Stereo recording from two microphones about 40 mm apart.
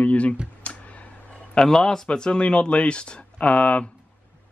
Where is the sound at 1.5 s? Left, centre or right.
Centre.